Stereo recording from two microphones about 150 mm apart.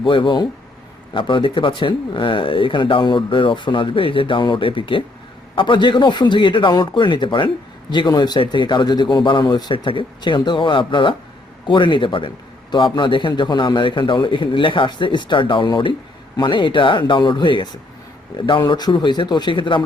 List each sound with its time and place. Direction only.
0.0 s speech: 35° left (ahead or behind)